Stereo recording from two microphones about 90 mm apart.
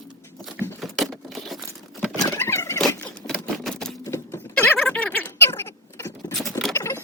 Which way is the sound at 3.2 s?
5° left (ahead or behind).